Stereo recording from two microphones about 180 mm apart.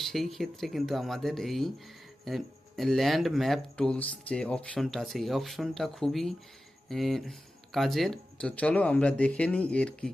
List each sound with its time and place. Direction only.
0.0 s speech: centre (ahead or behind)